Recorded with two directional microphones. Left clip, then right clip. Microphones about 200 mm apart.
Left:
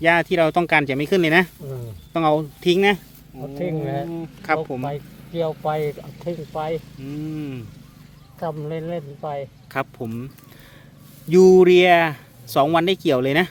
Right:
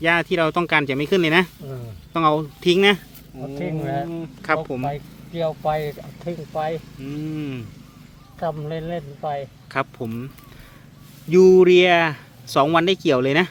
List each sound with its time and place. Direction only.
0.0 s speech: 5° left (ahead or behind)
3.6 s speech: 35° left (ahead or behind)
4.1 s speech: centre (ahead or behind)
4.9 s speech: 25° left (ahead or behind)
7.0 s speech: centre (ahead or behind)
8.4 s speech: 20° left (ahead or behind)
9.7 s speech: centre (ahead or behind)
11.3 s speech: 15° left (ahead or behind)